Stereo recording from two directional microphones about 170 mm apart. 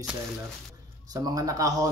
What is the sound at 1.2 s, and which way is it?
Speech, 20° right (ahead or behind).